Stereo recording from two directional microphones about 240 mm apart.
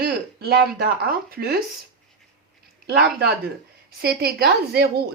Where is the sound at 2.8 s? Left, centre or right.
Right.